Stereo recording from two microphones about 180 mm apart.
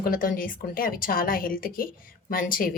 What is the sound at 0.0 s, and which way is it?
A woman's voice, 50° left (ahead or behind).